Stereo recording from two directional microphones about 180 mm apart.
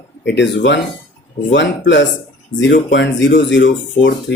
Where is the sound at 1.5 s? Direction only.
85° left.